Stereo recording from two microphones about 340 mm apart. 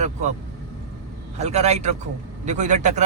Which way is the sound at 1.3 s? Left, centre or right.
Centre.